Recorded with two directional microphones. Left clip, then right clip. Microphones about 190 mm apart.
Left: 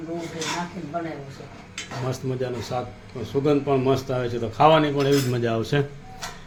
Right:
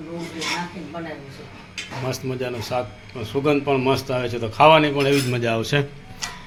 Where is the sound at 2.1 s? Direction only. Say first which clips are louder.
Right 1 dB; 5° left (ahead or behind).